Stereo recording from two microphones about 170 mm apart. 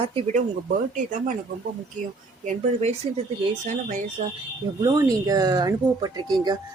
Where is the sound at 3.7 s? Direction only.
45° right (ahead or behind).